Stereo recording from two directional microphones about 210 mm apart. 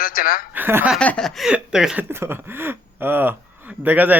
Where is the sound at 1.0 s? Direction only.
5° left (ahead or behind).